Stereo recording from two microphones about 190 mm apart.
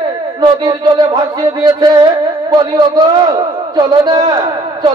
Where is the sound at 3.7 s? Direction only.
25° right (ahead or behind).